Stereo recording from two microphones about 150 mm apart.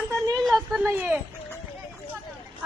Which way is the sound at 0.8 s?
10° right (ahead or behind).